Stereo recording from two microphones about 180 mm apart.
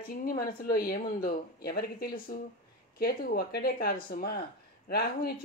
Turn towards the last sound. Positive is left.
turn(degrees=60)  # may be behind; listen again after turning